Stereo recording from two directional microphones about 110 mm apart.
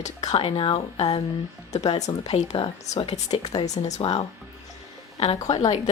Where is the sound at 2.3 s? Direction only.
70° left (ahead or behind).